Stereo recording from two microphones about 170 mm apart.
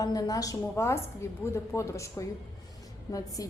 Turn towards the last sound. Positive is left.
turn(degrees=20)  # may be behind; listen again after turning